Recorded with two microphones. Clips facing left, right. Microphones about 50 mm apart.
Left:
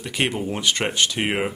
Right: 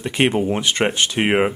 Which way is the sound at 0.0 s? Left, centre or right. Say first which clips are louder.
Right 6 dB; right.